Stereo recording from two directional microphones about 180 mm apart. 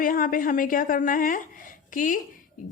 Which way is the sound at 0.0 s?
50° left (ahead or behind).